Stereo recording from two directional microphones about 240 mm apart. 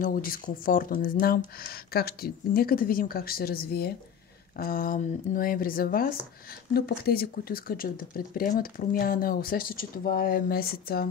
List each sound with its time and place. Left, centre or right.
0.0 s speech: left